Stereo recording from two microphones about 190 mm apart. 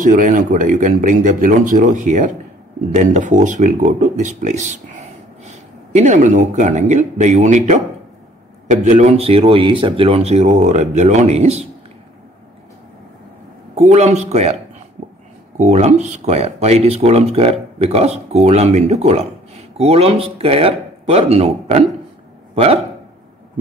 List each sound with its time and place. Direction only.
0.0 s speech: 45° right (ahead or behind)
13.7 s speech: 35° right (ahead or behind)
15.0 s a sound: 35° right (ahead or behind)
15.5 s speech: 35° right (ahead or behind)